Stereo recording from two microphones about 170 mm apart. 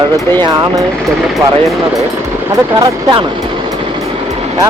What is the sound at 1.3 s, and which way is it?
Speech, centre (ahead or behind).